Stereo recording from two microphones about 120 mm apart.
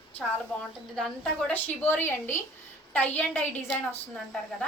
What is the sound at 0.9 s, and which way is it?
A woman's voice, 5° left (ahead or behind).